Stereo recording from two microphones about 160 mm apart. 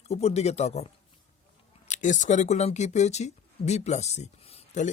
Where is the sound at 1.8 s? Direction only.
50° left (ahead or behind).